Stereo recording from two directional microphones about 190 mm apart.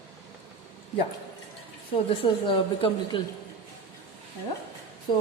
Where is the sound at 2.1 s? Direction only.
25° left (ahead or behind).